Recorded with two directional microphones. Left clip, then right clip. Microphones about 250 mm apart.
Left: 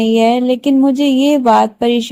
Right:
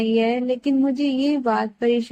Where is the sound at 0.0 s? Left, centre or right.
Left.